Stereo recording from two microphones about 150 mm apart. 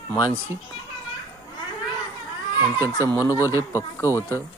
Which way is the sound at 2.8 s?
20° right (ahead or behind).